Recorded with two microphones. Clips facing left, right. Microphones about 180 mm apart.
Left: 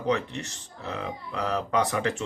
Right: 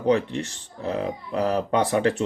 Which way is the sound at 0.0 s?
30° right (ahead or behind).